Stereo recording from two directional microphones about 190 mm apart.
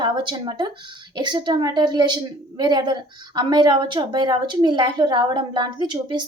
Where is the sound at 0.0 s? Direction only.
25° right (ahead or behind).